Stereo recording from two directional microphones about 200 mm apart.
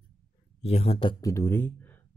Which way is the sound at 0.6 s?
30° left (ahead or behind).